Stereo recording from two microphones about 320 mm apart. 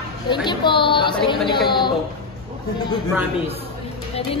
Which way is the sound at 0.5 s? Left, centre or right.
Centre.